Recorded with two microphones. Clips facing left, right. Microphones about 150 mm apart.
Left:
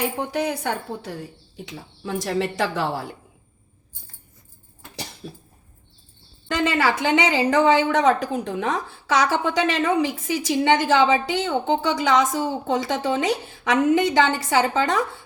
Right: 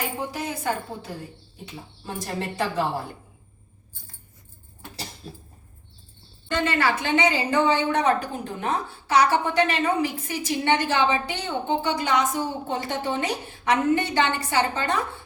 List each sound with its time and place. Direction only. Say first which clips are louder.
0.0 s a woman's voice: left 6 dB; 65° left (ahead or behind)
1.6 s a woman's voice: left 4 dB; 90° left
5.2 s a woman's voice: left 3 dB; 65° left (ahead or behind)
6.7 s a woman's voice: left 4 dB; 90° left